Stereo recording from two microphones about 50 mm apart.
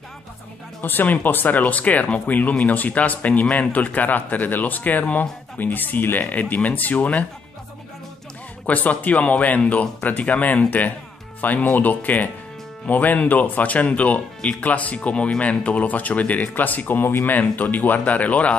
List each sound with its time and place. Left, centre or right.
0.7 s speech: left
8.6 s speech: left